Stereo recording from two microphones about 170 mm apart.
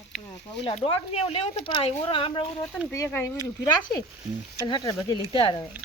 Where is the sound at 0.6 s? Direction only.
35° left (ahead or behind).